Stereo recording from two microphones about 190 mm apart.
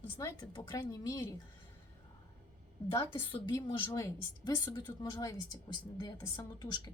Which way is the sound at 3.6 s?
15° left (ahead or behind).